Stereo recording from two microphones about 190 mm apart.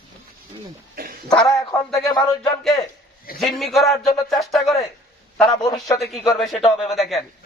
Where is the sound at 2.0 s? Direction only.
20° left (ahead or behind).